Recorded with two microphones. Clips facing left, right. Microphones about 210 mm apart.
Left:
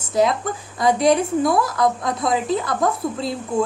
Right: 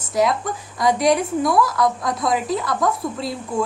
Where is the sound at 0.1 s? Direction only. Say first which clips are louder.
Left 1 dB; 25° left (ahead or behind).